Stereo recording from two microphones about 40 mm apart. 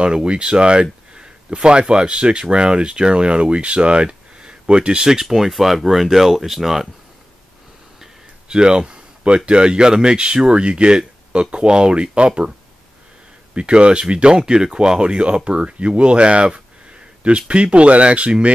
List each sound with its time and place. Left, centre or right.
0.0 s speech: right
5.2 s speech: centre
8.0 s a sound: right
9.5 s speech: right
13.6 s speech: right